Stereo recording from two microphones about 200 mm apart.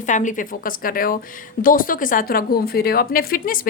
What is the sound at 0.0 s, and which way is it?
A woman's voice, 40° left (ahead or behind).